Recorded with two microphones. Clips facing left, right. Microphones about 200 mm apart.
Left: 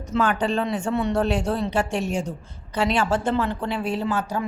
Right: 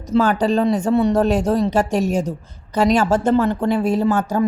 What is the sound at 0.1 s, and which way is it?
A woman's voice, 35° right (ahead or behind).